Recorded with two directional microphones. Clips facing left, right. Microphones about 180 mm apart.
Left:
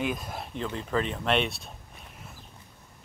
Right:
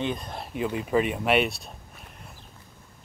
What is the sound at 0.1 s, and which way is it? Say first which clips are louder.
Speech: right 1 dB; 5° left (ahead or behind).